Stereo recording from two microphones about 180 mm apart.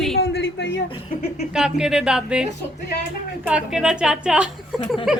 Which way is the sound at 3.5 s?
5° right (ahead or behind).